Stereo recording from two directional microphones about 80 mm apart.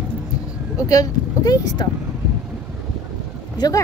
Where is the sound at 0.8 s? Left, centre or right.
Left.